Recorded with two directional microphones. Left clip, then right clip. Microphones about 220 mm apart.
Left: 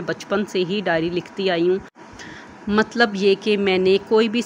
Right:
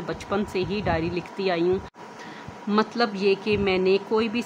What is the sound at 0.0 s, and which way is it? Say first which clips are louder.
A woman's voice: left 5 dB; 15° left (ahead or behind).